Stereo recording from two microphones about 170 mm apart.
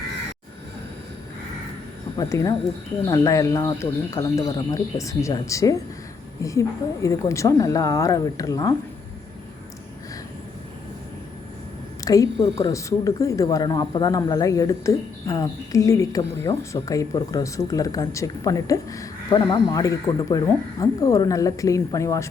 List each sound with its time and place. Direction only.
2.1 s speech: 20° left (ahead or behind)
12.0 s speech: 20° left (ahead or behind)